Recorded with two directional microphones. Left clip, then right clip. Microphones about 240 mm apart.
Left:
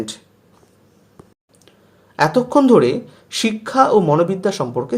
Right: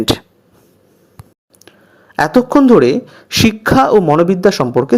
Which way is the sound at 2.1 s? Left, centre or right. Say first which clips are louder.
Right 3 dB; right.